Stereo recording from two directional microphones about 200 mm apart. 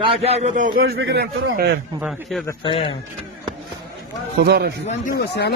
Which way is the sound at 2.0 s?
5° right (ahead or behind).